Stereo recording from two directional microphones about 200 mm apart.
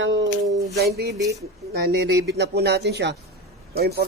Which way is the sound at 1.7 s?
55° right (ahead or behind).